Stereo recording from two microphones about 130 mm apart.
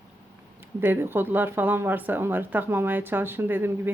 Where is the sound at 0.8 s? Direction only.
15° right (ahead or behind).